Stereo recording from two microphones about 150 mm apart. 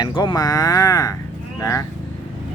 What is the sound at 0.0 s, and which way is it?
Speech, 30° left (ahead or behind).